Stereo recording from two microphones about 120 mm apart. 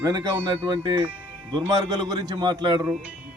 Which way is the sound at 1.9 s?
35° right (ahead or behind).